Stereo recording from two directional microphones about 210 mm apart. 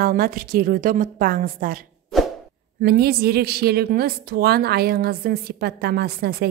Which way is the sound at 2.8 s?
50° right (ahead or behind).